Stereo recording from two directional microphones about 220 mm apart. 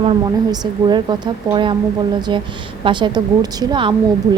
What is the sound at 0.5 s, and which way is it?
A woman's voice, 20° right (ahead or behind).